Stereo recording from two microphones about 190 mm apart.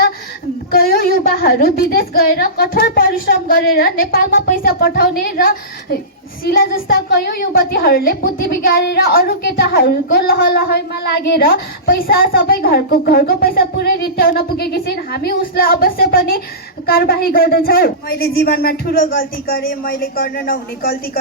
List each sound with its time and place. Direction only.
0.7 s a woman's voice: 50° left (ahead or behind)